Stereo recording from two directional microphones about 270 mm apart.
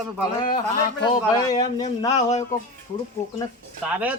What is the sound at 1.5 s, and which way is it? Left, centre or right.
Speech, centre.